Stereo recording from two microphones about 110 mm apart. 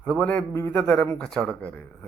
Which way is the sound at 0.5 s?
20° left (ahead or behind).